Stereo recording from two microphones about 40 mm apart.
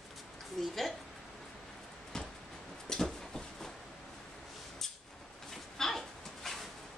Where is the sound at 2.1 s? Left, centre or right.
Centre.